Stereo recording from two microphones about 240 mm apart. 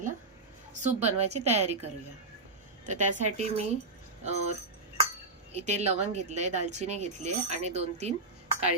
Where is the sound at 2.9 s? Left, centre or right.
Right.